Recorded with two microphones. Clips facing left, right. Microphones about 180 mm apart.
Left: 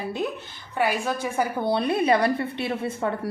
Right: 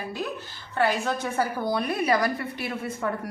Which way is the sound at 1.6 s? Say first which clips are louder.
Left 3 dB; 25° left (ahead or behind).